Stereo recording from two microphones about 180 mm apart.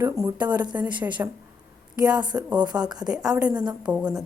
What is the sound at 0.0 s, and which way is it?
Speech, 15° right (ahead or behind).